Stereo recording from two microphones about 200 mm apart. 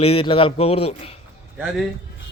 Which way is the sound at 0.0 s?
30° left (ahead or behind).